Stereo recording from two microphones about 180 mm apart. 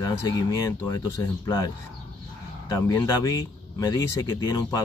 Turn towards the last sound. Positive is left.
turn(degrees=20)  # may be behind; listen again after turning